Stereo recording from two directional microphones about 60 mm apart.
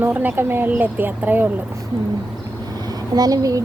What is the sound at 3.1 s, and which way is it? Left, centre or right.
Speech, right.